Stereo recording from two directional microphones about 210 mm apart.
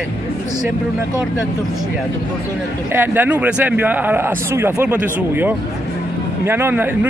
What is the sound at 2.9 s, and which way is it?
Speech, 10° right (ahead or behind).